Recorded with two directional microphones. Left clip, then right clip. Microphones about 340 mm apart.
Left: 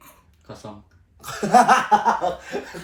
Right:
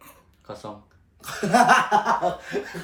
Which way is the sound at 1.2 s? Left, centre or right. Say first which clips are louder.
Left 3 dB; centre.